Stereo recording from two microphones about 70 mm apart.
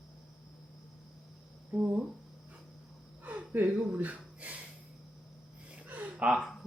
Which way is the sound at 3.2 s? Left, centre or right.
Right.